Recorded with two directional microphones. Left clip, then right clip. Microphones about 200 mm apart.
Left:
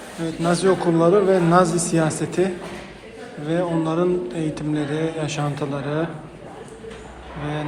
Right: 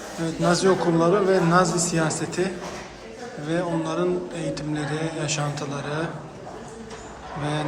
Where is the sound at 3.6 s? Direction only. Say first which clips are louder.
Left 5 dB; 10° right (ahead or behind).